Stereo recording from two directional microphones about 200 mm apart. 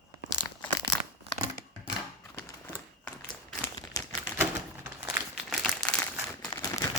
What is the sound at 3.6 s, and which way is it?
Crumpling, 15° left (ahead or behind).